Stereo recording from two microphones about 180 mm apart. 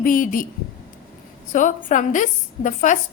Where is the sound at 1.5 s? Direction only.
45° left (ahead or behind).